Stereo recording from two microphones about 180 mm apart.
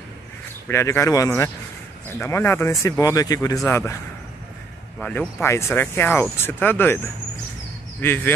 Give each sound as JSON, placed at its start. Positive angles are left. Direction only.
{"t": 0.7, "sound": "speech", "side_deg": 15}
{"t": 4.9, "sound": "speech", "side_deg": 5}
{"t": 8.0, "sound": "speech", "side_deg": 10}